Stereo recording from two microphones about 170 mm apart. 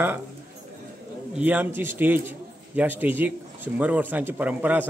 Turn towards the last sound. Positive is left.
turn(degrees=-10)  # may be behind; listen again after turning